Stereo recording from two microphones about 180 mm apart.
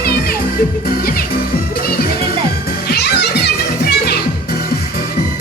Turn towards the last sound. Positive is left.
turn(degrees=65)  # may be behind; listen again after turning